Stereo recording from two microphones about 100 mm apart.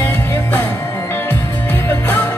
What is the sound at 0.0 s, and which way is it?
Music, 25° left (ahead or behind).